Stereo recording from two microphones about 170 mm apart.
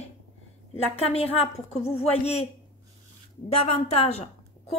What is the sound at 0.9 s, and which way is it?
A woman's voice, 35° left (ahead or behind).